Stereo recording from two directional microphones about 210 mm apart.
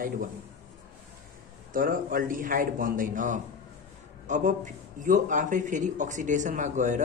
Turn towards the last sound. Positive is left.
turn(degrees=-35)  # may be behind; listen again after turning